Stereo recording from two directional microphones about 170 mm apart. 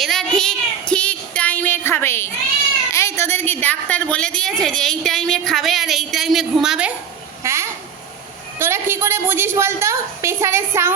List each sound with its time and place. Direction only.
0.0 s child singing: centre (ahead or behind)
2.9 s speech: 15° left (ahead or behind); by 6.9 s 5° right (ahead or behind)
7.4 s a sound: 15° right (ahead or behind)
8.5 s a woman's voice: 15° right (ahead or behind)